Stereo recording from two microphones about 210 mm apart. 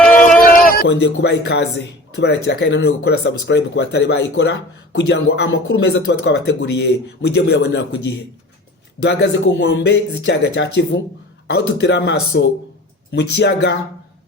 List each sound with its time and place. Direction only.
0.4 s speech: 40° left (ahead or behind)
9.0 s speech: 55° left (ahead or behind)